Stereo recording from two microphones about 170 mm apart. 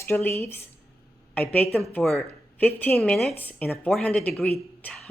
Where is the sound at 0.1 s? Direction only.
15° left (ahead or behind).